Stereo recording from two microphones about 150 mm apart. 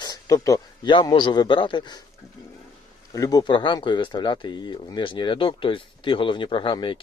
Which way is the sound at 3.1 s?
25° left (ahead or behind).